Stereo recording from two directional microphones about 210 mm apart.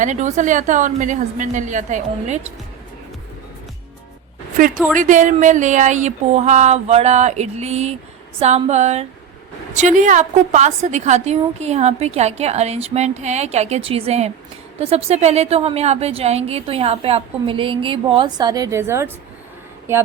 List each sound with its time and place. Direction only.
0.0 s a woman's voice: 35° right (ahead or behind)
4.5 s a woman's voice: 40° right (ahead or behind); by 19.1 s 10° right (ahead or behind)